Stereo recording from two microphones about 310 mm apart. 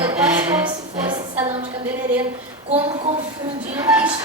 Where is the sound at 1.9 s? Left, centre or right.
Centre.